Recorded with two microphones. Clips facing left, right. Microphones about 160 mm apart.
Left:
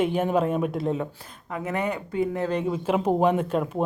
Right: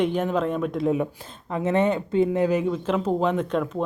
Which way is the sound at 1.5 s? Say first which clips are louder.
Right 6 dB; 25° right (ahead or behind).